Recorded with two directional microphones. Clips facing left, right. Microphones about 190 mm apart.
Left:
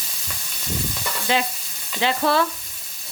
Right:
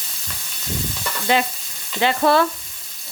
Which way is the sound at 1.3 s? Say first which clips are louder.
Right 3 dB; 55° right (ahead or behind).